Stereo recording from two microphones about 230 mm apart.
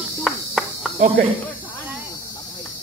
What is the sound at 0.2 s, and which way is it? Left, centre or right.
Cricket, centre.